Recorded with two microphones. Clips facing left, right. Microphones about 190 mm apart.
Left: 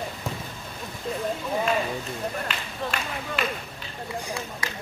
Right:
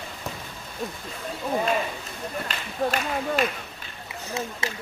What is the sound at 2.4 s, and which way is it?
Speech, 40° right (ahead or behind).